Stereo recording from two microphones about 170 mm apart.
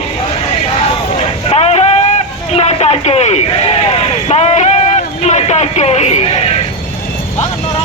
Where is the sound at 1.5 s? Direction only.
40° left (ahead or behind).